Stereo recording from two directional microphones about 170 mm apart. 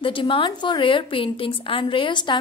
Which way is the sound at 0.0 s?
30° left (ahead or behind).